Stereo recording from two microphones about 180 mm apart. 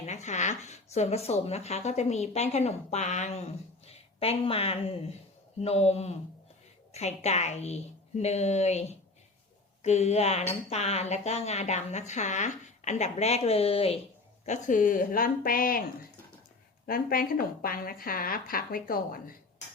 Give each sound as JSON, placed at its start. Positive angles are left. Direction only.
{"t": 0.0, "sound": "speech", "side_deg": 40}
{"t": 14.4, "sound": "a woman's voice", "side_deg": 40}